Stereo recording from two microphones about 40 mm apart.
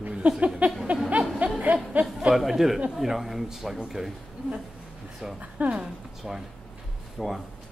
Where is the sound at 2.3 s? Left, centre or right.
Centre.